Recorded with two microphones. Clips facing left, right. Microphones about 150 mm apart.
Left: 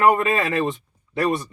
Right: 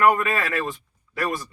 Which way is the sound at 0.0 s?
20° left (ahead or behind).